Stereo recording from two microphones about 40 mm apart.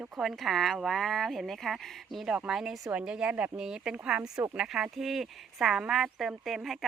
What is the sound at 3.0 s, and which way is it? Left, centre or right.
Speech, right.